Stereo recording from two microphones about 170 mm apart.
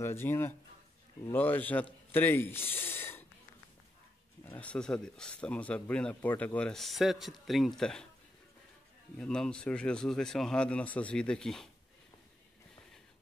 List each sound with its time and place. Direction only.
0.0 s a man's voice: 15° left (ahead or behind)
4.5 s speech: 10° left (ahead or behind)
9.2 s speech: 5° left (ahead or behind)